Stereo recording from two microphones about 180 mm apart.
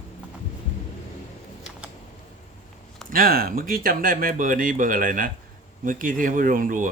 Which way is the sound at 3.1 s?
55° right (ahead or behind).